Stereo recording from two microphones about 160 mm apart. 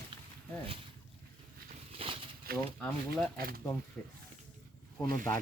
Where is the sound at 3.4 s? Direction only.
65° right (ahead or behind).